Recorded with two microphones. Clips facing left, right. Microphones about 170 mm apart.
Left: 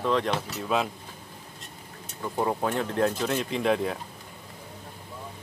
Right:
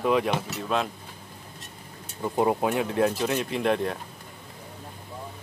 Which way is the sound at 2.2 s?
20° right (ahead or behind).